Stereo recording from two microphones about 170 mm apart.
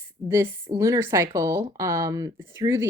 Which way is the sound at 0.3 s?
15° right (ahead or behind).